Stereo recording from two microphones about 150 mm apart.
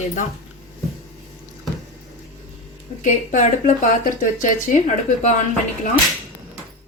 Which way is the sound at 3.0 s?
55° left (ahead or behind).